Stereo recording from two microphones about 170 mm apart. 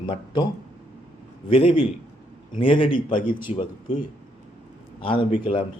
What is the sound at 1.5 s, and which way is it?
A man's voice, 35° left (ahead or behind).